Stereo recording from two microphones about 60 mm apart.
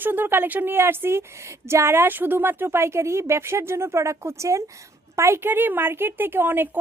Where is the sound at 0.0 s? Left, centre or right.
Right.